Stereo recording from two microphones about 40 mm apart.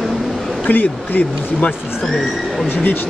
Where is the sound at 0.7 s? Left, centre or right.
Left.